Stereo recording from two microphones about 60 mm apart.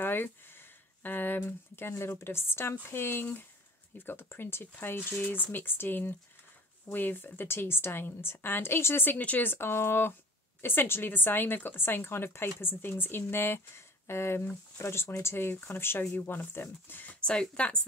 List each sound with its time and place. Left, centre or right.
0.0 s speech: left
9.1 s speech: left
17.2 s speech: centre